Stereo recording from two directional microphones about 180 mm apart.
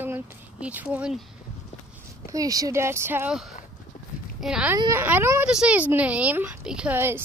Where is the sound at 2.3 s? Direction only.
20° right (ahead or behind).